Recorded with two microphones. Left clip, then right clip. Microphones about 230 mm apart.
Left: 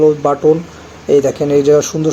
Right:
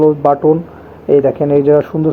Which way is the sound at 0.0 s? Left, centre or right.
Centre.